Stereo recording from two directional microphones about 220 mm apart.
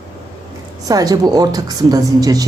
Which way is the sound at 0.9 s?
15° right (ahead or behind).